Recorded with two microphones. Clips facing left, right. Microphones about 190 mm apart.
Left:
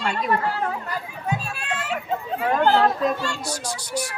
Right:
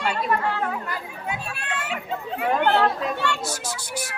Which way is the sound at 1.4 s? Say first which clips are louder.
Left 1 dB; 65° right (ahead or behind).